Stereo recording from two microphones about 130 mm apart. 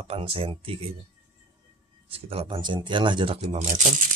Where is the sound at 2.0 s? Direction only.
45° right (ahead or behind).